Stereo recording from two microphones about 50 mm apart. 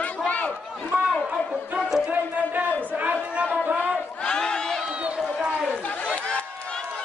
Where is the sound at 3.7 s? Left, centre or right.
Right.